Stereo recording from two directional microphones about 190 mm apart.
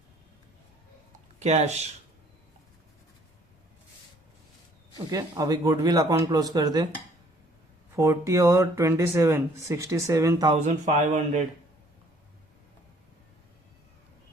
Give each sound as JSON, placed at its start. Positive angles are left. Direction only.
{"t": 1.4, "sound": "speech", "side_deg": -35}
{"t": 5.1, "sound": "speech", "side_deg": -20}
{"t": 7.9, "sound": "speech", "side_deg": -15}
{"t": 10.5, "sound": "speech", "side_deg": -40}